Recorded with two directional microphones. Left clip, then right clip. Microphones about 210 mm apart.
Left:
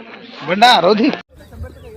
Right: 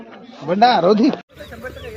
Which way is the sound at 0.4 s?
35° right (ahead or behind).